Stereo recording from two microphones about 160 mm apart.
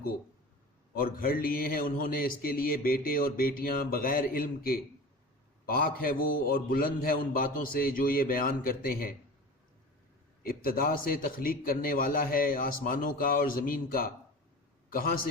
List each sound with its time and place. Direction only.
0.9 s a man's voice: 65° left (ahead or behind)
10.4 s a man's voice: 65° left (ahead or behind)